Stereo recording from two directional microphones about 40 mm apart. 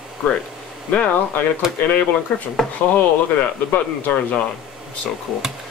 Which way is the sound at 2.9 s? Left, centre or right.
Left.